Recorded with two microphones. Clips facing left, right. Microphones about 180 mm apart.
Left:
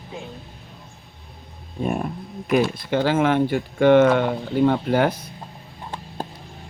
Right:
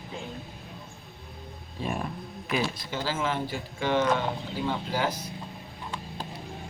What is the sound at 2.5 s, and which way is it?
Speech, 60° left (ahead or behind).